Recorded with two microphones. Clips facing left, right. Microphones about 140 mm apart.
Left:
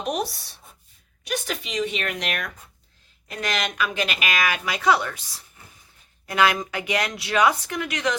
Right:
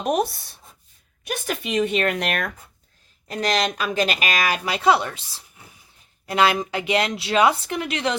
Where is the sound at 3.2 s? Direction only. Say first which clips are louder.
Right 5 dB; 35° right (ahead or behind).